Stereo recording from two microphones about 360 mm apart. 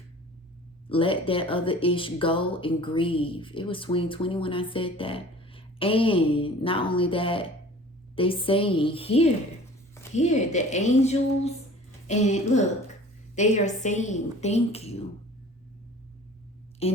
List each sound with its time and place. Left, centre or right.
0.9 s a woman's voice: centre
16.8 s a woman's voice: centre